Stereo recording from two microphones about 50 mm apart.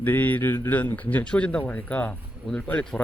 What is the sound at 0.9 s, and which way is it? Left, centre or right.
Speech, left.